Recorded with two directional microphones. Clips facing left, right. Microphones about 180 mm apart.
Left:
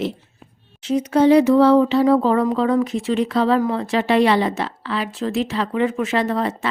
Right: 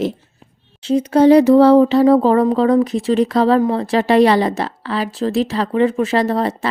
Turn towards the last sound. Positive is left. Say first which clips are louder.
# right 3 dB
turn(degrees=-35)  # may be behind; listen again after turning